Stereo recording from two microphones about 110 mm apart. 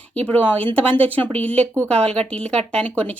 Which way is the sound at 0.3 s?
15° left (ahead or behind).